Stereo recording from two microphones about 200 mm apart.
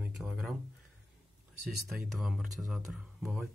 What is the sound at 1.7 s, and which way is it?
Speech, centre (ahead or behind).